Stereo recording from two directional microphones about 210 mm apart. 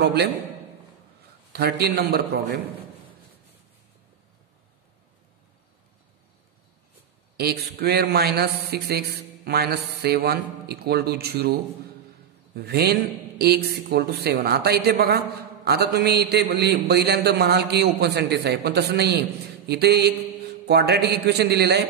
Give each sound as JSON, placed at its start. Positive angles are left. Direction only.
{"t": 0.0, "sound": "a man's voice", "side_deg": -50}
{"t": 1.5, "sound": "speech", "side_deg": -50}
{"t": 7.3, "sound": "speech", "side_deg": -50}
{"t": 12.5, "sound": "speech", "side_deg": -50}